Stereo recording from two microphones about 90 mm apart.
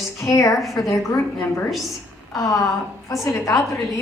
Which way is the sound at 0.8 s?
35° left (ahead or behind).